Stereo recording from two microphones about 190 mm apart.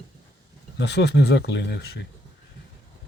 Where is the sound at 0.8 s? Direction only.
60° left (ahead or behind).